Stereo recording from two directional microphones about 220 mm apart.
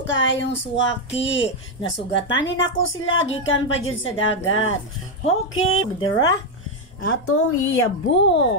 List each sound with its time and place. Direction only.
0.0 s a woman's voice: 55° left (ahead or behind)
5.9 s speech: 20° left (ahead or behind)
7.1 s a woman's voice: 80° left; by 8.5 s 55° left (ahead or behind)